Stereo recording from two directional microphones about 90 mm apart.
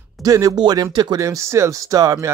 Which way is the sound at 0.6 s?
55° right (ahead or behind).